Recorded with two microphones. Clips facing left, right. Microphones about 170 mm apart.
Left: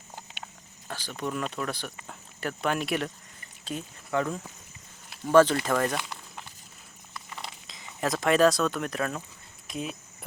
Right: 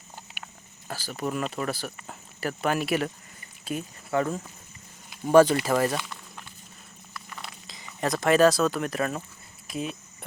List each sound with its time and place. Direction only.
0.9 s speech: 5° right (ahead or behind)
7.1 s a sound: 20° left (ahead or behind)
7.7 s speech: centre (ahead or behind)